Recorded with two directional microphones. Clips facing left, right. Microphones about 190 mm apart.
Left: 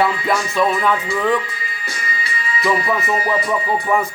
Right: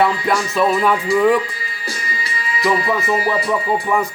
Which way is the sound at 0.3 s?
Centre (ahead or behind).